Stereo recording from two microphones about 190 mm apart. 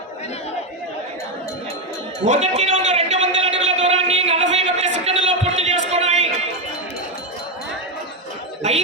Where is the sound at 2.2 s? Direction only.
35° right (ahead or behind).